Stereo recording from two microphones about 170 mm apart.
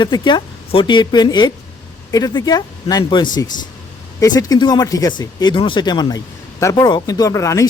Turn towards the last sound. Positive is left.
turn(degrees=20)  # may be behind; listen again after turning